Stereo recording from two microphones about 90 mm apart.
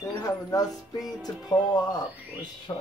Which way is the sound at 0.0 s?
40° left (ahead or behind).